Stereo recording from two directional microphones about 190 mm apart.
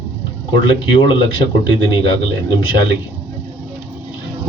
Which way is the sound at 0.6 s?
25° left (ahead or behind).